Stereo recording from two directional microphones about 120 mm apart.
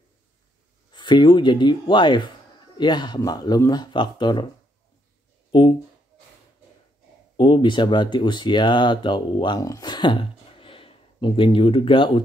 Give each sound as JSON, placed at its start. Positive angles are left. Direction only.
{"t": 0.9, "sound": "speech", "side_deg": 40}
{"t": 5.5, "sound": "speech", "side_deg": 40}
{"t": 7.3, "sound": "speech", "side_deg": 45}